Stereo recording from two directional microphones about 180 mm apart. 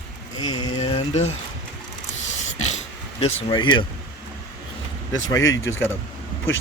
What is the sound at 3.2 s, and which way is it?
Speech, 30° left (ahead or behind).